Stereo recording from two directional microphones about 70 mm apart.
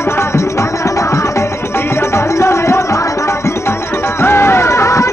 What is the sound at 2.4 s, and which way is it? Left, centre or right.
Music, left.